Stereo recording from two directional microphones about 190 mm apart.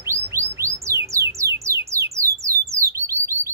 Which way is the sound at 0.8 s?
15° right (ahead or behind).